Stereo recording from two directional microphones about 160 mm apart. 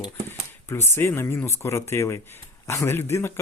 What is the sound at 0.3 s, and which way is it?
Speech, 15° left (ahead or behind).